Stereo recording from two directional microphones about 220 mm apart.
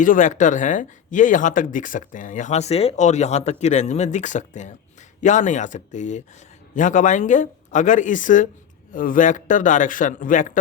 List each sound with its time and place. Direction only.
0.0 s speech: 35° left (ahead or behind)